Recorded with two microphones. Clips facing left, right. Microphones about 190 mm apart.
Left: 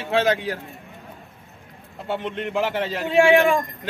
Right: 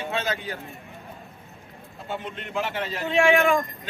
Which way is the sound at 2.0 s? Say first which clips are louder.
Left 7 dB; 70° left (ahead or behind).